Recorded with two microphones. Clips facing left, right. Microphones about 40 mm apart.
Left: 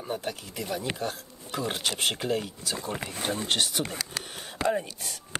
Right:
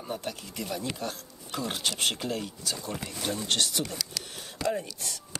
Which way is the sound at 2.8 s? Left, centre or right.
Left.